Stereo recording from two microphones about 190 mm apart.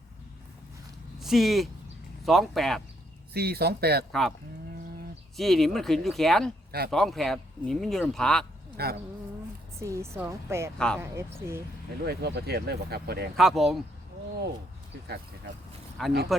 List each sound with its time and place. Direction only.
1.2 s speech: centre (ahead or behind)
3.3 s speech: 55° right (ahead or behind)
5.4 s speech: centre (ahead or behind)
6.7 s speech: 55° right (ahead or behind)
6.9 s speech: centre (ahead or behind)
8.8 s speech: 55° right (ahead or behind)
9.8 s speech: 15° right (ahead or behind)
10.8 s speech: 5° left (ahead or behind)
11.0 s speech: 15° right (ahead or behind)
12.0 s speech: 60° right (ahead or behind)
13.3 s speech: centre (ahead or behind)
16.0 s speech: centre (ahead or behind)